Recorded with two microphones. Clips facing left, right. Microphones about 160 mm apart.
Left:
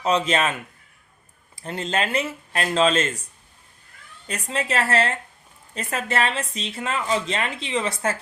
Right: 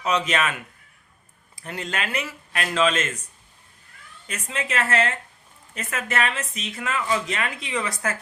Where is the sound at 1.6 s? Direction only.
30° left (ahead or behind).